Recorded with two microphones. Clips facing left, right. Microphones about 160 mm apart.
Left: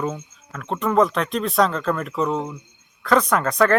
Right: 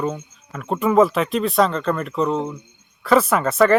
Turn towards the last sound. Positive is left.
turn(degrees=-5)  # may be behind; listen again after turning